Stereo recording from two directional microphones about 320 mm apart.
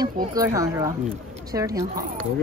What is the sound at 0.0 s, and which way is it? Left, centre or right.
Speech, centre.